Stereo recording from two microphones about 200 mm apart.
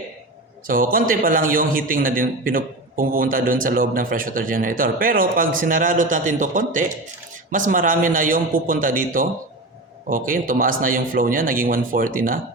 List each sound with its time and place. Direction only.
0.7 s a man's voice: 45° right (ahead or behind)